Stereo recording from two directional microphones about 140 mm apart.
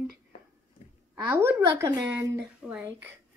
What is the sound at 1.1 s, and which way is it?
A woman's voice, 20° right (ahead or behind).